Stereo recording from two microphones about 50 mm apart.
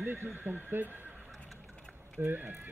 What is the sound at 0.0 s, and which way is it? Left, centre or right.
Speech, right.